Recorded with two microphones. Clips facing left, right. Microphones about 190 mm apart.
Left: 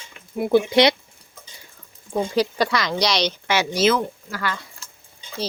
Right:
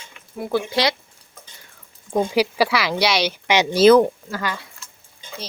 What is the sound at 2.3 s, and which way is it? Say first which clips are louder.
A woman's voice: even; 10° right (ahead or behind).